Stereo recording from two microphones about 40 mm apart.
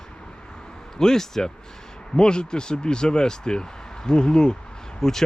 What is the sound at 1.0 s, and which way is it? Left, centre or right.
Speech, centre.